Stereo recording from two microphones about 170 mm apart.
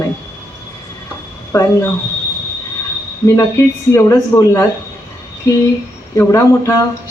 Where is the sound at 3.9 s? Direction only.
15° left (ahead or behind).